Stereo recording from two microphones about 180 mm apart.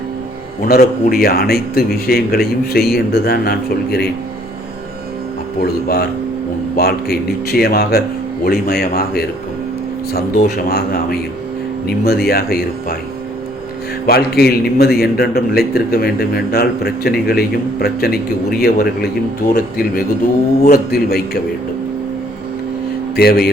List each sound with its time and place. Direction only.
0.7 s a man's voice: 55° left (ahead or behind)
6.7 s a man's voice: 60° left (ahead or behind)
14.1 s a man's voice: 60° left (ahead or behind)
23.1 s a man's voice: 60° left (ahead or behind)